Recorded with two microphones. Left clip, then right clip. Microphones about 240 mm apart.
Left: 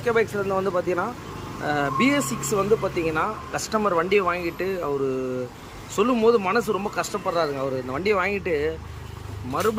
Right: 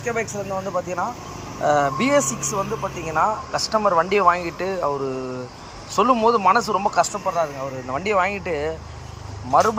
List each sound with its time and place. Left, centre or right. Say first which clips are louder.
0.0 s speech: left 3 dB; centre
0.5 s speech: even; left
1.6 s speech: right 4 dB; centre
6.0 s speech: right 3 dB; centre